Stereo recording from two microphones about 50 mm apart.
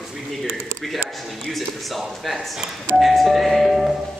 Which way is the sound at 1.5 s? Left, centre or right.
Centre.